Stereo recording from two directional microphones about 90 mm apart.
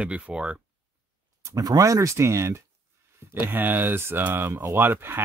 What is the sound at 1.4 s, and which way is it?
Speech, 40° right (ahead or behind).